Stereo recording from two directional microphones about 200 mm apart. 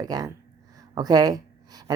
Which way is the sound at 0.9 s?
20° right (ahead or behind).